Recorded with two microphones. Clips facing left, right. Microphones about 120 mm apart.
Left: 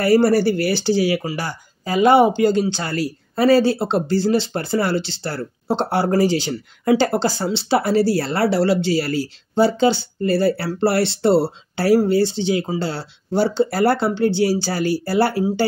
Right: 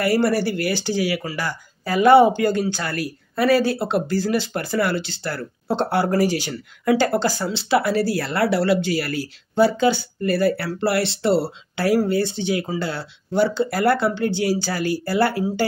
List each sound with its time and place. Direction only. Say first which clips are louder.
0.0 s speech: left 4 dB; 40° left (ahead or behind)